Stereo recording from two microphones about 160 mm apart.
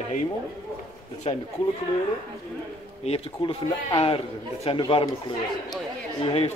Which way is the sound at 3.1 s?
35° left (ahead or behind).